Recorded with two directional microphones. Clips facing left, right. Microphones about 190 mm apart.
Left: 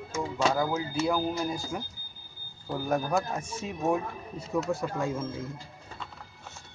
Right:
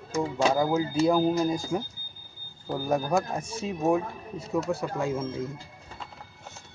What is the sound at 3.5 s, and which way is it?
Speech, 30° right (ahead or behind).